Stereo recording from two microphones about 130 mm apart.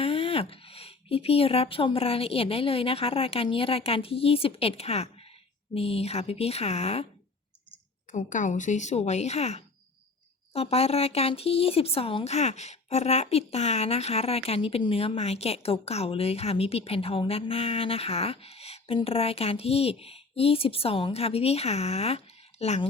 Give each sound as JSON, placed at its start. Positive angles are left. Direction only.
{"t": 0.0, "sound": "speech", "side_deg": 50}
{"t": 8.3, "sound": "a woman's voice", "side_deg": 75}